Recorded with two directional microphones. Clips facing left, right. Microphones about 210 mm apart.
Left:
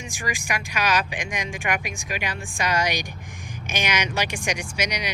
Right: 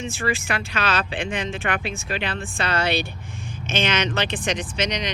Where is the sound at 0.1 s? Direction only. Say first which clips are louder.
Right 1 dB; 15° left (ahead or behind).